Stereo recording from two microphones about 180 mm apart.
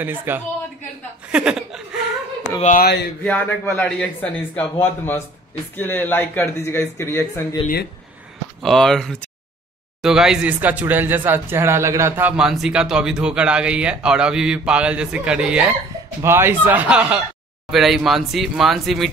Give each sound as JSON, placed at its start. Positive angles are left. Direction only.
{"t": 0.0, "sound": "speech", "side_deg": -10}
{"t": 2.6, "sound": "speech", "side_deg": 45}
{"t": 3.3, "sound": "a man's voice", "side_deg": 10}
{"t": 8.6, "sound": "speech", "side_deg": 0}